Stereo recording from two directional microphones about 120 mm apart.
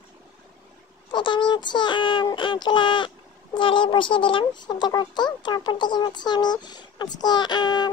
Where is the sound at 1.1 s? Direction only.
40° left (ahead or behind).